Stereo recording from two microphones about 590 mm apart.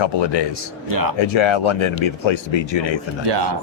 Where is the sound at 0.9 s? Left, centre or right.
Right.